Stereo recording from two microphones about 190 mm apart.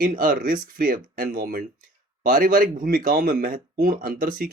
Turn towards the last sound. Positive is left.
turn(degrees=-50)  # may be behind; listen again after turning